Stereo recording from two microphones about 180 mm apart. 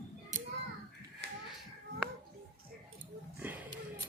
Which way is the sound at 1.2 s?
70° right (ahead or behind).